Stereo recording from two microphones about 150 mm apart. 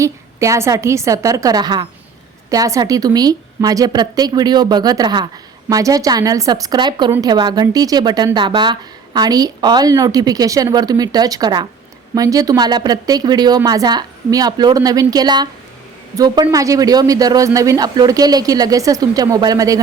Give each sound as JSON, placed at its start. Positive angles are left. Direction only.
{"t": 0.0, "sound": "a woman's voice", "side_deg": -20}